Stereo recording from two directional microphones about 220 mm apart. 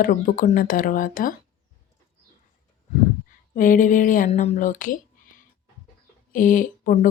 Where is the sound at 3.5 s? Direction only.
35° left (ahead or behind).